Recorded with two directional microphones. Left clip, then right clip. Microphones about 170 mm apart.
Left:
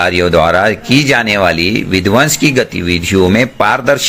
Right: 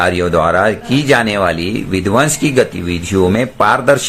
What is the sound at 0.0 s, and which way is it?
Speech, 20° left (ahead or behind).